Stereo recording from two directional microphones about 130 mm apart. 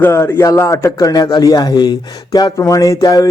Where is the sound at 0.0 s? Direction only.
20° left (ahead or behind).